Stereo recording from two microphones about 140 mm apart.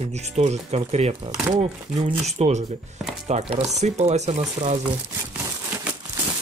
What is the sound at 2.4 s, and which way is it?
Speech, 55° right (ahead or behind).